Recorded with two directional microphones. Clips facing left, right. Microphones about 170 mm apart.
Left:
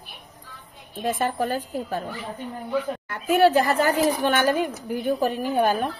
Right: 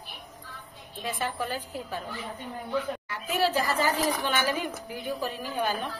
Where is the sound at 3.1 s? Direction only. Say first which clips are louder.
Left 10 dB; 55° left (ahead or behind).